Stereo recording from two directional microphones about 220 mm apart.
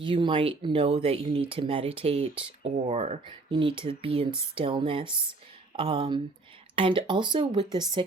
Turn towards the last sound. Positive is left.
turn(degrees=-20)  # may be behind; listen again after turning